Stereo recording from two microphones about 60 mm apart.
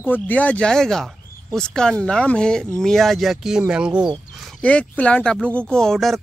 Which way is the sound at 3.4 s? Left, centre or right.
Centre.